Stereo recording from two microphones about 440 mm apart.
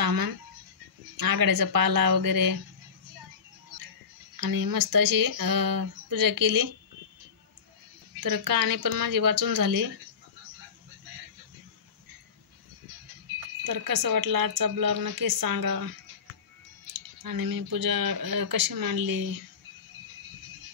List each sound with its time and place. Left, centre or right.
0.0 s a sound: right
1.1 s speech: right
4.4 s speech: right
8.2 s speech: right
13.7 s speech: right
17.2 s speech: right